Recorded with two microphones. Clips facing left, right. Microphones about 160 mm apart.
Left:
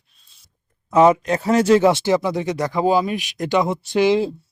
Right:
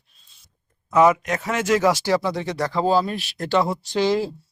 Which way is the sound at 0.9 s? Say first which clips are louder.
Left 3 dB; 30° left (ahead or behind).